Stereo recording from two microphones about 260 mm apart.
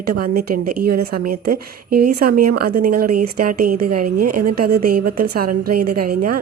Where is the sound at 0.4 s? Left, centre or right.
Right.